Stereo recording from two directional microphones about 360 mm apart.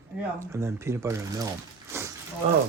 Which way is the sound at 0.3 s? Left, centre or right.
Centre.